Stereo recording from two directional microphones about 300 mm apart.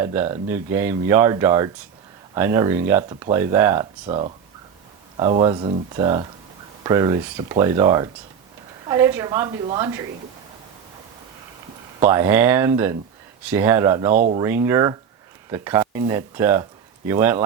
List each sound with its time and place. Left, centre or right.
0.0 s speech: centre
11.9 s speech: centre
14.2 s speech: right
14.4 s speech: centre